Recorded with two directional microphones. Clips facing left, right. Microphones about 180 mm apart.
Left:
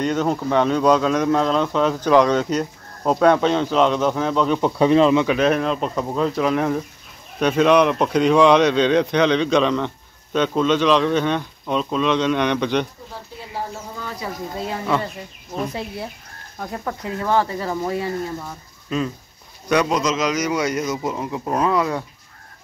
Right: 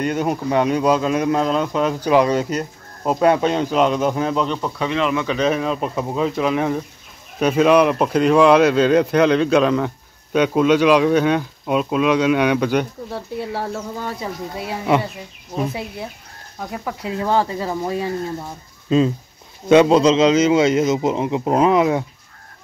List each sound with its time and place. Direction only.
0.0 s speech: 10° right (ahead or behind)
4.6 s speech: 30° left (ahead or behind)
5.1 s speech: 10° left (ahead or behind); by 12.8 s 10° right (ahead or behind)
13.1 s speech: 70° right (ahead or behind)
14.7 s speech: 15° right (ahead or behind)
15.5 s speech: 5° right (ahead or behind)
18.9 s a man's voice: 25° right (ahead or behind)